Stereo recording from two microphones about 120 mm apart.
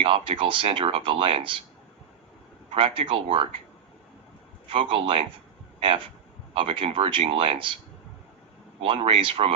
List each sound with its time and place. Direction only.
0.0 s speech: 45° right (ahead or behind)
2.7 s speech: 50° right (ahead or behind)
4.7 s speech: 50° right (ahead or behind)
8.8 s speech: 50° right (ahead or behind)